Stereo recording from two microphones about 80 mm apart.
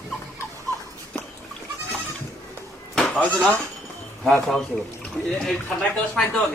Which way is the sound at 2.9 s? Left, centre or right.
Centre.